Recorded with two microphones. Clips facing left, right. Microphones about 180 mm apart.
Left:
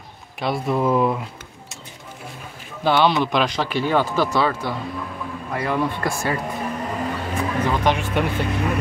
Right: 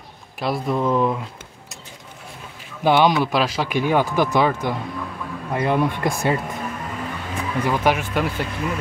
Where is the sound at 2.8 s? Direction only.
15° right (ahead or behind).